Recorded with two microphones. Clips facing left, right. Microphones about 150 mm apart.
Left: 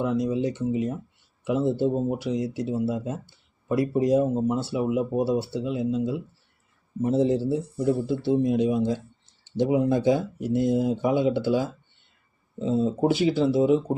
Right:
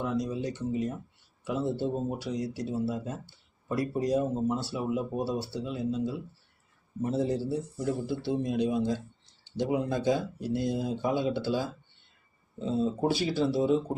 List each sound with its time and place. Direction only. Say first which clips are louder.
0.0 s speech: left 6 dB; 20° left (ahead or behind)